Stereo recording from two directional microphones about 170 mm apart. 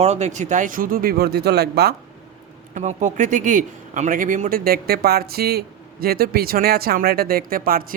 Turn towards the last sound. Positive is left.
turn(degrees=-60)  # may be behind; listen again after turning